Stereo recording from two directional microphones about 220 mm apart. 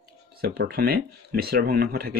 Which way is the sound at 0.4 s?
45° right (ahead or behind).